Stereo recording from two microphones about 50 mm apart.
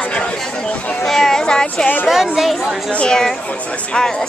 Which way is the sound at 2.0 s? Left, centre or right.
Centre.